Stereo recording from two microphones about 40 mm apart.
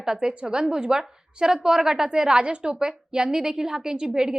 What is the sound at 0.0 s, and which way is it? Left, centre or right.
A woman's voice, centre.